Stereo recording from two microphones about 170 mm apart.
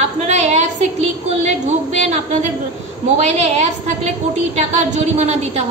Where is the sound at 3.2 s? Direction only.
40° right (ahead or behind).